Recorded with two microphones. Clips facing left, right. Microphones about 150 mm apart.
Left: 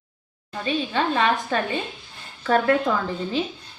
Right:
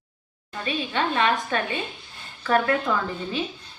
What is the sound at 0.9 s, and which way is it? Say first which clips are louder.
A woman's voice: even; 30° left (ahead or behind).